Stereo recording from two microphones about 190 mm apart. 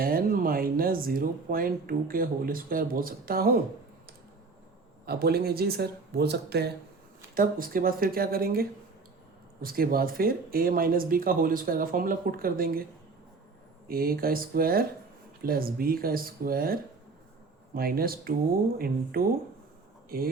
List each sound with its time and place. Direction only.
0.0 s speech: 50° right (ahead or behind)
5.0 s speech: 55° right (ahead or behind)
7.3 s speech: 50° right (ahead or behind)
13.8 s speech: 50° right (ahead or behind)